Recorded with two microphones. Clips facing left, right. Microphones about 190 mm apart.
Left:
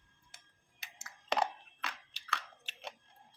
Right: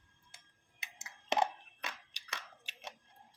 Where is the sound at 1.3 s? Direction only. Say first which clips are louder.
Right 1 dB; 20° right (ahead or behind).